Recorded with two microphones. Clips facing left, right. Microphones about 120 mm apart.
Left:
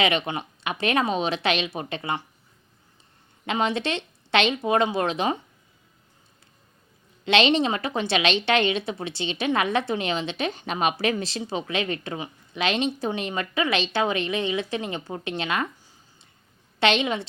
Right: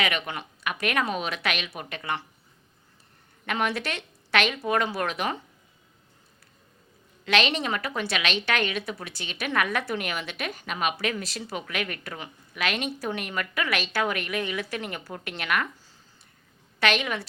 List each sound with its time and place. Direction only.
0.0 s a woman's voice: 30° left (ahead or behind)
3.4 s a woman's voice: 20° left (ahead or behind)
7.3 s a woman's voice: 25° left (ahead or behind)